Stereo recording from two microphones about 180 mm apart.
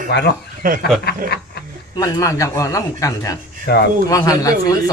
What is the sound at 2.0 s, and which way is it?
Speech, 20° left (ahead or behind).